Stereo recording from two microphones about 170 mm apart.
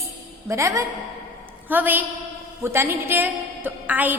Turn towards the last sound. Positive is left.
turn(degrees=-10)  # may be behind; listen again after turning